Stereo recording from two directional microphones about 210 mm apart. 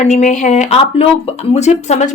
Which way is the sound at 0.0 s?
35° left (ahead or behind).